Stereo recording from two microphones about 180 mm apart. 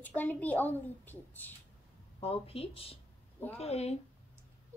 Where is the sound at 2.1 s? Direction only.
35° left (ahead or behind).